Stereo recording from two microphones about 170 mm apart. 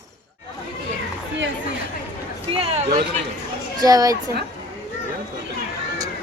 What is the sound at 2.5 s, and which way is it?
Speech, 35° right (ahead or behind).